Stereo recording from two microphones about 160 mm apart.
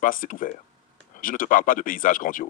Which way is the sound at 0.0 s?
55° left (ahead or behind).